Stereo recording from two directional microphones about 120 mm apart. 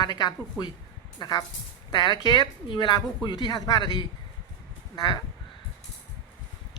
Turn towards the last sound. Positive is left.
turn(degrees=35)  # may be behind; listen again after turning